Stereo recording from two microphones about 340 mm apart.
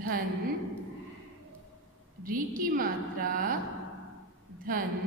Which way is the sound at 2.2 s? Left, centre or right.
Right.